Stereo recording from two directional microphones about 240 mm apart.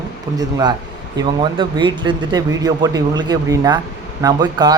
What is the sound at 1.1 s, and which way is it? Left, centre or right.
Speech, centre.